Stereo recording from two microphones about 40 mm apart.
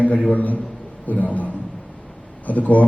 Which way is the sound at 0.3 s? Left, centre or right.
Left.